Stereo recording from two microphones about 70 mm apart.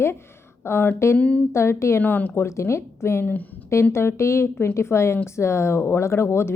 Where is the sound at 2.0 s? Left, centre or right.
Left.